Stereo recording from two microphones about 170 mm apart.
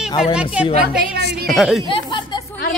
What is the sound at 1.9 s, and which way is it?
Chatter, 30° left (ahead or behind).